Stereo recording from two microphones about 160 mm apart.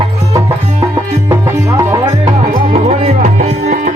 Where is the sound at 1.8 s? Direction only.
25° right (ahead or behind).